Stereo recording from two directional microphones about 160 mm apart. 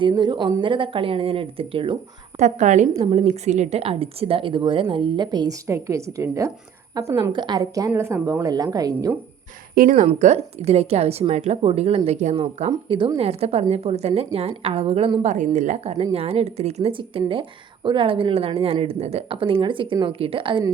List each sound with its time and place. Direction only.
0.0 s speech: 30° right (ahead or behind)
2.4 s a woman's voice: 45° right (ahead or behind); by 9.1 s 25° right (ahead or behind)
9.7 s speech: 55° right (ahead or behind)
10.1 s speech: 45° right (ahead or behind)